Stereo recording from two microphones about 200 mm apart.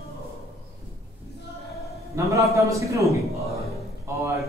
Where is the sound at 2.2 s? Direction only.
15° right (ahead or behind).